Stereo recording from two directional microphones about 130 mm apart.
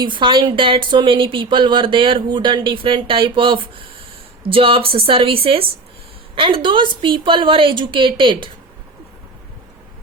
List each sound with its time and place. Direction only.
0.0 s speech: 40° right (ahead or behind)